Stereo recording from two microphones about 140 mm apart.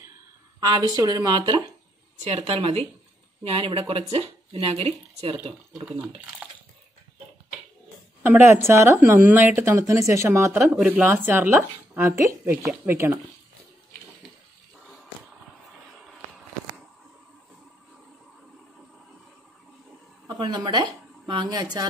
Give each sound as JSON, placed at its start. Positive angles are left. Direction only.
{"t": 0.6, "sound": "speech", "side_deg": -25}
{"t": 2.2, "sound": "speech", "side_deg": -45}
{"t": 8.2, "sound": "speech", "side_deg": -15}
{"t": 10.6, "sound": "speech", "side_deg": -10}
{"t": 20.3, "sound": "speech", "side_deg": -30}